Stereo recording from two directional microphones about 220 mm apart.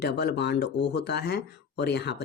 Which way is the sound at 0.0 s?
50° left (ahead or behind).